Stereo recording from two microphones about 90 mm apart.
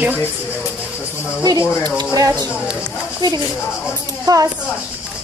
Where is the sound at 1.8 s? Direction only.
45° right (ahead or behind).